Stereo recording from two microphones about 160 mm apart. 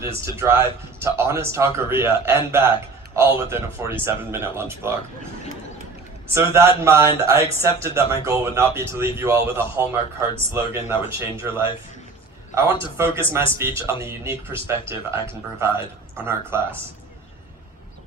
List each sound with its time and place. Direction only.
0.2 s a man's voice: 15° right (ahead or behind)
6.3 s a man's voice: 15° right (ahead or behind)
12.8 s a man's voice: 15° right (ahead or behind)